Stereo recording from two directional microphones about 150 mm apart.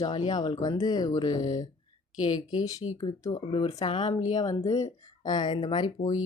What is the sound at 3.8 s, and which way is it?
Speech, 30° left (ahead or behind).